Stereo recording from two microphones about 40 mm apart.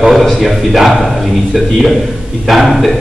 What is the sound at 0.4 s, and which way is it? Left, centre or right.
A man's voice, centre.